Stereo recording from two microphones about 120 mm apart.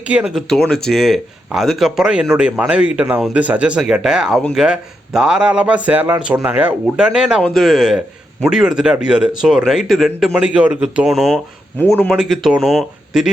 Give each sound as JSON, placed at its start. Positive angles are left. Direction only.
{"t": 0.0, "sound": "a man's voice", "side_deg": -10}
{"t": 0.3, "sound": "a man's voice", "side_deg": 5}
{"t": 11.8, "sound": "speech", "side_deg": 15}
{"t": 12.0, "sound": "speech", "side_deg": 0}